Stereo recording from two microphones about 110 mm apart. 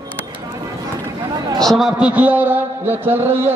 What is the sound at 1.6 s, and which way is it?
A man's voice, centre (ahead or behind).